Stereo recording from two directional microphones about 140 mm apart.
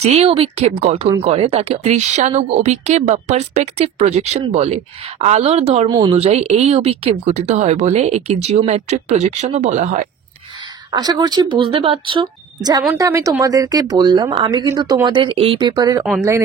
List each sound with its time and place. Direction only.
0.0 s speech: 45° right (ahead or behind)
5.9 s speech: 30° right (ahead or behind)
6.1 s speech: 50° right (ahead or behind)
10.9 s speech: 30° right (ahead or behind)
12.6 s speech: 25° right (ahead or behind); by 15.6 s 40° right (ahead or behind)
15.6 s speech: 30° right (ahead or behind)